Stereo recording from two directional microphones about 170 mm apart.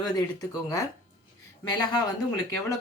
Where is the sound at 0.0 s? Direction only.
20° left (ahead or behind).